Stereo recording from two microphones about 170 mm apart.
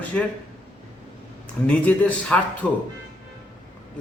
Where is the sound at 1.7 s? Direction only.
10° left (ahead or behind).